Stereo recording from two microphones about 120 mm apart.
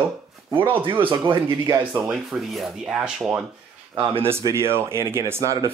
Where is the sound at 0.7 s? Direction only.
45° right (ahead or behind).